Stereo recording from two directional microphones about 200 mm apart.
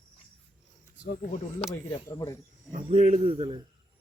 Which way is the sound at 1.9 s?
20° left (ahead or behind).